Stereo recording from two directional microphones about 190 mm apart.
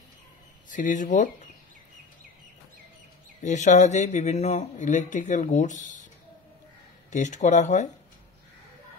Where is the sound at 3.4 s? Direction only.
40° left (ahead or behind).